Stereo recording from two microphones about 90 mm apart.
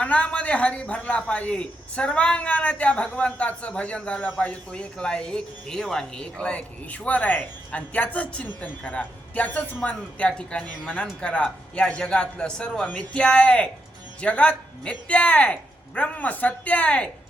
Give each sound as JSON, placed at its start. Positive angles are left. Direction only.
{"t": 0.0, "sound": "speech", "side_deg": 15}